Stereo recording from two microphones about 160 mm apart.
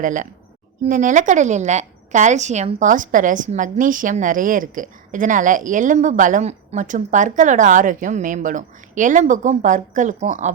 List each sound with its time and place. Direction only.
0.0 s a woman's voice: 50° right (ahead or behind)